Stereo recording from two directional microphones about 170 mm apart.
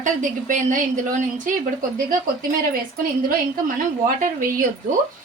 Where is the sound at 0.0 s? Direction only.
50° right (ahead or behind).